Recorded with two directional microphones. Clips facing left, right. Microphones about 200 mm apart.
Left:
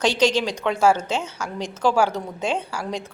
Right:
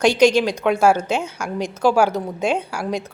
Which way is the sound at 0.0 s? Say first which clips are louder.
Right 5 dB; 10° right (ahead or behind).